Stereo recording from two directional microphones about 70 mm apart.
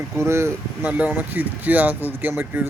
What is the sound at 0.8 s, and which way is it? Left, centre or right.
A man's voice, right.